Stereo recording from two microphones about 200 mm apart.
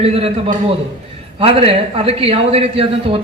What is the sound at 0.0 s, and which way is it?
A man's voice, 30° right (ahead or behind).